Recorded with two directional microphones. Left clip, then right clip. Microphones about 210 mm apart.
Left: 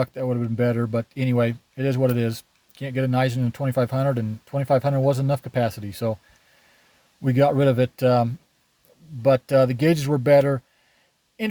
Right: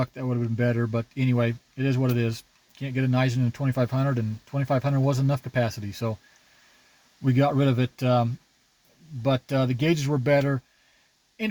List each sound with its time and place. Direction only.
0.0 s speech: 30° left (ahead or behind)
7.2 s speech: 35° left (ahead or behind)